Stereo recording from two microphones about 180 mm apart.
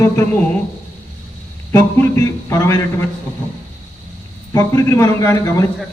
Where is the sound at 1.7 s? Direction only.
15° left (ahead or behind).